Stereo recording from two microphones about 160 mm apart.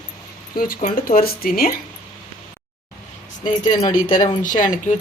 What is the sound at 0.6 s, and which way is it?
Speech, 60° left (ahead or behind).